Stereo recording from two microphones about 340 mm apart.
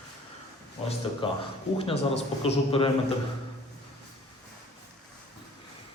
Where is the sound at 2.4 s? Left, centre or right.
Centre.